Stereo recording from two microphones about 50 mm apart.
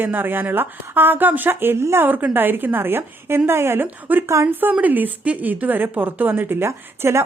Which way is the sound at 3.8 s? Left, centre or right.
Right.